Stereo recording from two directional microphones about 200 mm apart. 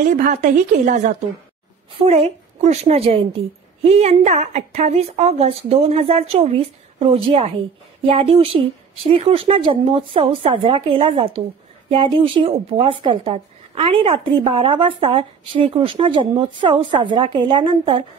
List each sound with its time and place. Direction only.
0.0 s a woman's voice: 40° right (ahead or behind)
1.9 s a woman's voice: 30° right (ahead or behind)